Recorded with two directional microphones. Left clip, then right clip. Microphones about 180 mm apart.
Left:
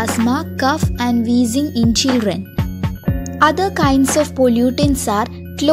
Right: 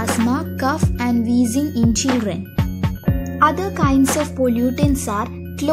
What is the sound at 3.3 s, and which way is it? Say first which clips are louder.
Music: left 3 dB; 25° left (ahead or behind).